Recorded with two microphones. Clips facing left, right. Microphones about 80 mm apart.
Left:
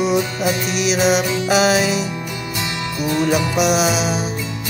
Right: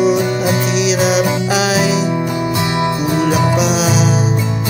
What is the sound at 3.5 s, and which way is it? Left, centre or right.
Music, centre.